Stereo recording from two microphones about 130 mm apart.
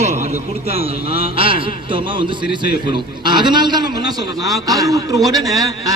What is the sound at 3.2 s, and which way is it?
A man's voice, 35° right (ahead or behind).